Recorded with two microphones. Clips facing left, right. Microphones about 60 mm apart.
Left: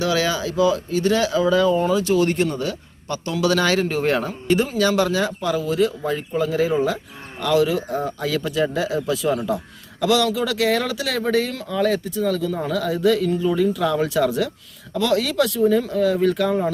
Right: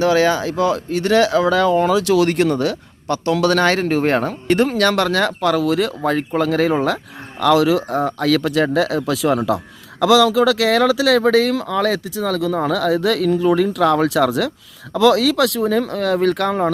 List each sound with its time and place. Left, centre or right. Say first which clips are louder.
0.0 s speech: right 6 dB; right